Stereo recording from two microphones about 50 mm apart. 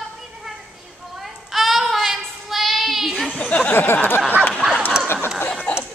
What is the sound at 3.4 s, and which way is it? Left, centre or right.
Speech, left.